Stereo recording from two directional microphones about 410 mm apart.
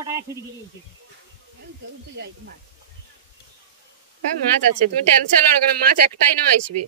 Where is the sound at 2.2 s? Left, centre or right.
Right.